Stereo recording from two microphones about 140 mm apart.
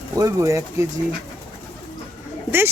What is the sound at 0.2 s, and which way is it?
Speech, 20° right (ahead or behind).